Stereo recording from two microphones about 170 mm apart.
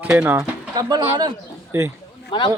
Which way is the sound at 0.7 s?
25° right (ahead or behind).